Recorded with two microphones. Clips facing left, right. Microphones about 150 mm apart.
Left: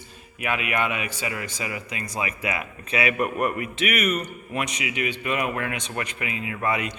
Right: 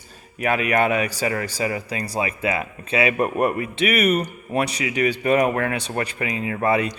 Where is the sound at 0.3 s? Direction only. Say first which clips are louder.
Right 6 dB; 40° right (ahead or behind).